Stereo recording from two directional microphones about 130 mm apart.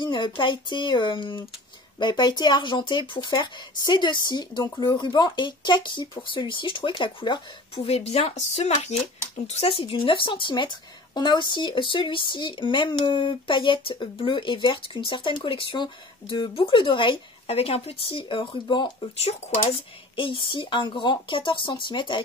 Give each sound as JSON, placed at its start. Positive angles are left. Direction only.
{"t": 0.0, "sound": "speech", "side_deg": 35}
{"t": 7.8, "sound": "speech", "side_deg": 50}
{"t": 9.5, "sound": "speech", "side_deg": 50}
{"t": 19.1, "sound": "speech", "side_deg": 55}
{"t": 20.2, "sound": "speech", "side_deg": 40}